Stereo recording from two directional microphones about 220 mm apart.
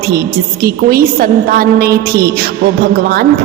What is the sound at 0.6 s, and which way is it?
A woman's voice, 40° right (ahead or behind).